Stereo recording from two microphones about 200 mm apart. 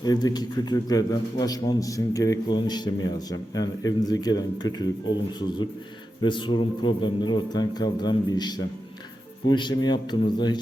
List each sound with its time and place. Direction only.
0.0 s a man's voice: 20° left (ahead or behind)